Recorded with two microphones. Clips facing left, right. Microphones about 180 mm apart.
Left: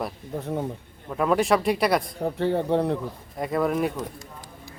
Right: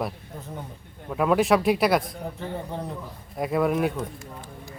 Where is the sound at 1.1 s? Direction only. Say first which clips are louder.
Right 1 dB; centre (ahead or behind).